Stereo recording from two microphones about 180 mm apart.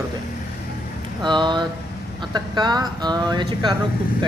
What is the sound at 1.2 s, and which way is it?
Speech, 25° right (ahead or behind).